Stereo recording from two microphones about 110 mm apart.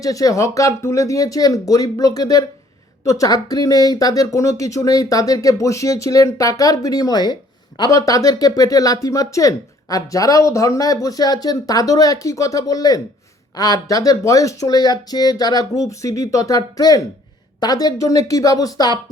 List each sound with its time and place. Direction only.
0.0 s speech: 30° left (ahead or behind)